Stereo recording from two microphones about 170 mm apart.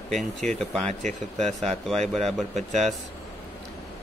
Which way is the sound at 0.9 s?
45° right (ahead or behind).